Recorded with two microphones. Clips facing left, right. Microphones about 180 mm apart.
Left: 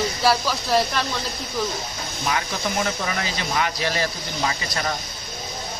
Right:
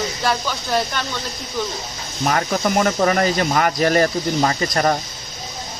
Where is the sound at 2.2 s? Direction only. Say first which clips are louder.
Right 7 dB; 55° right (ahead or behind).